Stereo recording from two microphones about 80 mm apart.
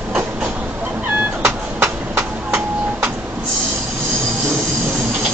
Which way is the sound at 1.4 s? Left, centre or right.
Right.